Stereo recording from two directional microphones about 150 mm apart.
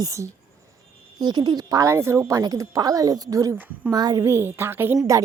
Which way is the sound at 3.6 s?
10° right (ahead or behind).